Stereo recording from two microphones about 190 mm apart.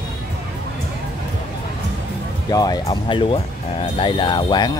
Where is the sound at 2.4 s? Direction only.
20° left (ahead or behind).